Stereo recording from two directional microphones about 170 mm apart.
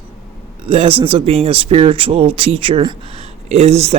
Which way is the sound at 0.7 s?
35° right (ahead or behind).